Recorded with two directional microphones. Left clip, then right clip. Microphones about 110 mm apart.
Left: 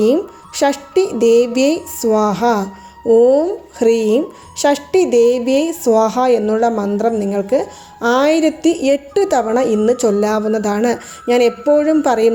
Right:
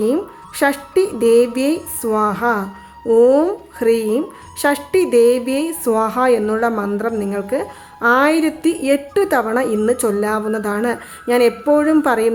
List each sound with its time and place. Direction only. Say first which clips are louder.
0.0 s a woman's voice: left 4 dB; 20° left (ahead or behind)
3.1 s speech: left 3 dB; centre (ahead or behind)
3.8 s a woman's voice: left 3 dB; 20° left (ahead or behind)